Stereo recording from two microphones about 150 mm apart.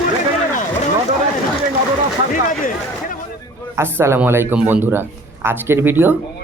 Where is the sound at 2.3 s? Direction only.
60° left (ahead or behind).